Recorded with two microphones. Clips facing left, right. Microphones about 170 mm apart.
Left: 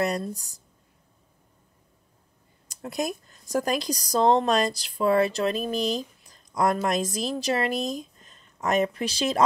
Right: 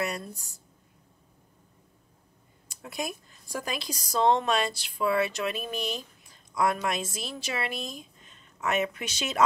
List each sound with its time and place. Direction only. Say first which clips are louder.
0.0 s speech: left 6 dB; 35° left (ahead or behind)
2.7 s speech: left 6 dB; 40° left (ahead or behind)